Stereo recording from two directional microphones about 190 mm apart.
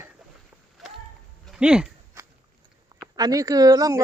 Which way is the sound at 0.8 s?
Centre (ahead or behind).